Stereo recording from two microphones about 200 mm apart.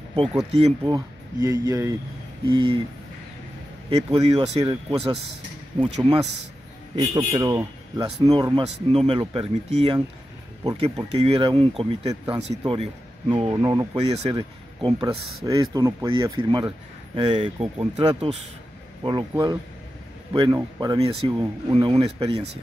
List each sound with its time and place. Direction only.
0.5 s speech: 30° right (ahead or behind)
0.8 s speech: 20° right (ahead or behind)
3.9 s speech: 30° right (ahead or behind)
5.8 s speech: 30° right (ahead or behind)
13.9 s speech: 30° right (ahead or behind)
19.0 s speech: 20° right (ahead or behind)